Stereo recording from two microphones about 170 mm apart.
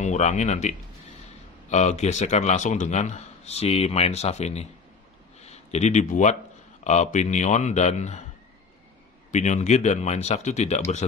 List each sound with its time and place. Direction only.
0.0 s a man's voice: 45° left (ahead or behind)
9.3 s a man's voice: 45° left (ahead or behind)